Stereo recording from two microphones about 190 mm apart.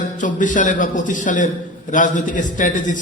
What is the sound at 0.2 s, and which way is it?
A man's voice, 40° left (ahead or behind).